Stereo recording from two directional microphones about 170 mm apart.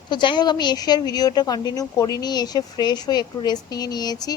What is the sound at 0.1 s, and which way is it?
A woman's voice, 25° left (ahead or behind).